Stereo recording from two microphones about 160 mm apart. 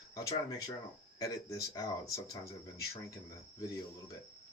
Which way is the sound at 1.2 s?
20° left (ahead or behind).